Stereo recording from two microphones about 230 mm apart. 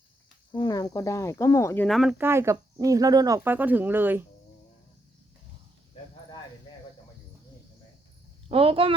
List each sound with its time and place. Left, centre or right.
0.5 s speech: centre
8.4 s a woman's voice: right